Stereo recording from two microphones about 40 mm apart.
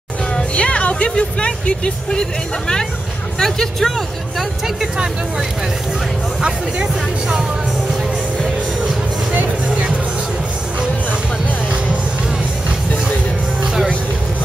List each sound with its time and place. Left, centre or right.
0.4 s speech: left
3.3 s speech: centre
6.4 s speech: right